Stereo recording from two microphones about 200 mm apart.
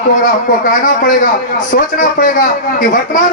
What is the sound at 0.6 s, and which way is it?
A man's voice, 40° left (ahead or behind).